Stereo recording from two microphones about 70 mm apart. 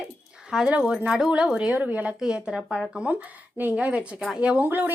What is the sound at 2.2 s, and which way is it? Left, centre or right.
Speech, centre.